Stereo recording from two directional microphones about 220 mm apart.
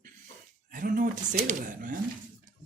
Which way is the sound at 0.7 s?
40° right (ahead or behind).